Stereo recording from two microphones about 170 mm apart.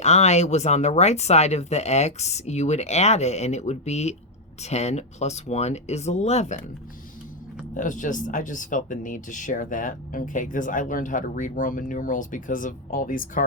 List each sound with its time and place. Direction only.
0.0 s speech: 40° left (ahead or behind)
7.7 s speech: 50° left (ahead or behind)